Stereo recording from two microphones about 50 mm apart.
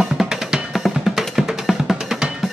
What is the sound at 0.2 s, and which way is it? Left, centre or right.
Drum, centre.